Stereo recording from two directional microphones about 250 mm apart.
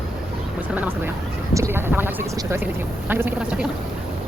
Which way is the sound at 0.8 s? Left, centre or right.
Centre.